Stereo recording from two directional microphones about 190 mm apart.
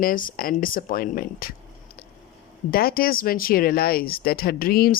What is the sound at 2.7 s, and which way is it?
Speech, 50° left (ahead or behind).